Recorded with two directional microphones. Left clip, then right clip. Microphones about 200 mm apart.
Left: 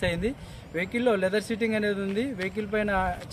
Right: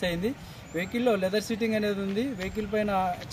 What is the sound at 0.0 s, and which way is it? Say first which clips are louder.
Speech: left 1 dB; 10° right (ahead or behind).